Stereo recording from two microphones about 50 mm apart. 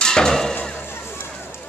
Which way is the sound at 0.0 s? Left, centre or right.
Centre.